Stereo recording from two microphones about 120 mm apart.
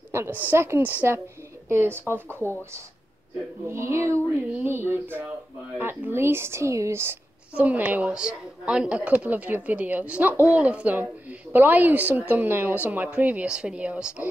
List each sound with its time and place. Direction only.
0.1 s a woman's voice: 20° right (ahead or behind)
3.6 s a woman's voice: 20° right (ahead or behind)